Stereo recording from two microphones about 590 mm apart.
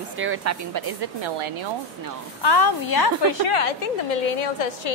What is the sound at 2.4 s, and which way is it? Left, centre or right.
Speech, left.